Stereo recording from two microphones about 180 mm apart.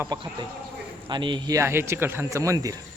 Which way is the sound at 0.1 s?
20° right (ahead or behind).